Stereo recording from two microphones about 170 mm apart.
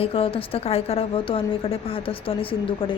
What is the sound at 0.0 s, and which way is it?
A woman's voice, 35° left (ahead or behind).